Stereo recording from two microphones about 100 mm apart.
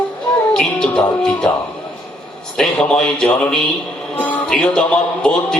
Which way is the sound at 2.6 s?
10° left (ahead or behind).